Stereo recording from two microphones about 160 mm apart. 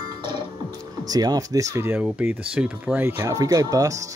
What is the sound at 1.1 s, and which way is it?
Speech, 25° right (ahead or behind).